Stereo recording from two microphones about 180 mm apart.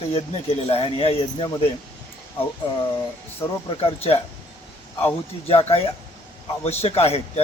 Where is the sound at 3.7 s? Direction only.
30° left (ahead or behind).